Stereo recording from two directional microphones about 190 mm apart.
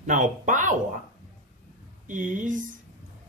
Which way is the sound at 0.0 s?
40° right (ahead or behind).